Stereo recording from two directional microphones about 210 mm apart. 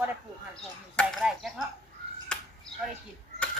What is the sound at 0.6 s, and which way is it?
Speech, centre (ahead or behind).